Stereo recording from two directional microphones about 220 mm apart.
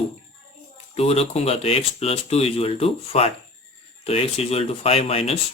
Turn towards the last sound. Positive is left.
turn(degrees=25)  # may be behind; listen again after turning